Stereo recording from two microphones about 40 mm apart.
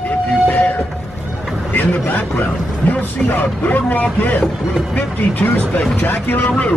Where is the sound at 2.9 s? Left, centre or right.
Left.